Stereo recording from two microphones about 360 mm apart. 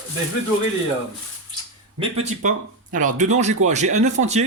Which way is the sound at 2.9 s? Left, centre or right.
Right.